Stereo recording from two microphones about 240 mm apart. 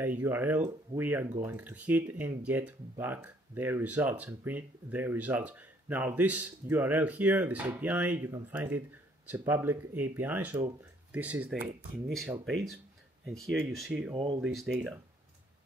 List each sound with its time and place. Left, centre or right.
0.0 s speech: centre
14.1 s speech: centre
14.4 s speech: centre